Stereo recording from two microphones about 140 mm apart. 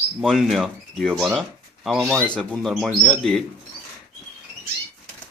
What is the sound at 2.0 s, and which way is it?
Speech, 20° right (ahead or behind).